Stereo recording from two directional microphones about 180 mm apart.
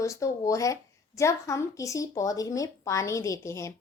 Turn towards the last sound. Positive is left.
turn(degrees=15)  # may be behind; listen again after turning